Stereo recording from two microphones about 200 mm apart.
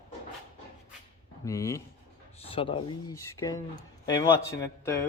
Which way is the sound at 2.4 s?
30° left (ahead or behind).